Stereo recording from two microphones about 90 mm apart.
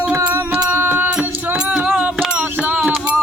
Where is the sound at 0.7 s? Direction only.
25° right (ahead or behind).